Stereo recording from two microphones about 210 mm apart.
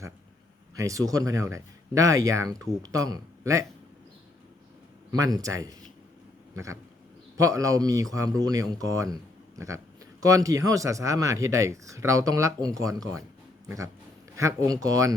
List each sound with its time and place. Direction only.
0.8 s speech: 15° right (ahead or behind)
5.1 s speech: 15° right (ahead or behind)
7.3 s speech: 15° right (ahead or behind)